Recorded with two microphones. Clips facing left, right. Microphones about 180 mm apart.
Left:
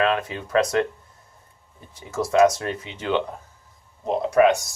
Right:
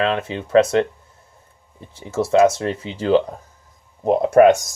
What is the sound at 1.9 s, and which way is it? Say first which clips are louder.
Speech: right 5 dB; 25° right (ahead or behind).